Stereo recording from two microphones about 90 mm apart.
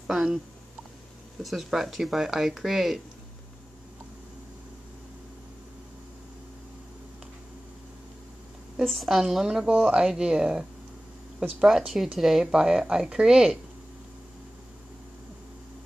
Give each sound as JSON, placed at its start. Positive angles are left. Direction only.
{"t": 0.0, "sound": "speech", "side_deg": -5}
{"t": 1.4, "sound": "speech", "side_deg": 0}
{"t": 8.8, "sound": "speech", "side_deg": 0}